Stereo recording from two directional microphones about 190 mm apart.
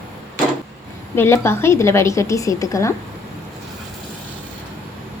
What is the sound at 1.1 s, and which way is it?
A woman's voice, 10° left (ahead or behind).